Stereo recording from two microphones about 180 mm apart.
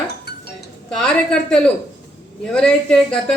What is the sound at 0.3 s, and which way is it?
Music, 65° left (ahead or behind).